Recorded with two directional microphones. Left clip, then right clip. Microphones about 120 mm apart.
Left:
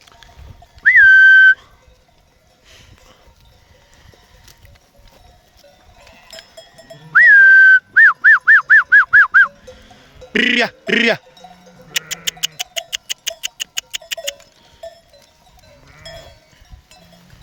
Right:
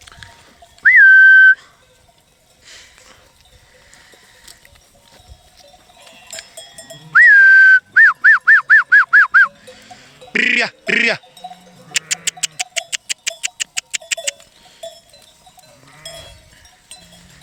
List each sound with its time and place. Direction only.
0.0 s whistling: 10° left (ahead or behind)
2.6 s a sound: 20° left (ahead or behind)
6.2 s sheep: 30° left (ahead or behind)
8.2 s music: 30° left (ahead or behind)
11.9 s cowbell: 15° left (ahead or behind)
12.4 s clock: 25° left (ahead or behind)
16.0 s sheep: 20° left (ahead or behind)